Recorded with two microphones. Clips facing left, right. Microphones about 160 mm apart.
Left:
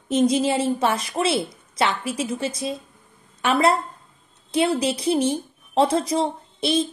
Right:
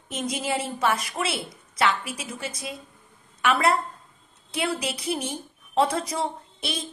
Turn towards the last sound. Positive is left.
turn(degrees=25)  # may be behind; listen again after turning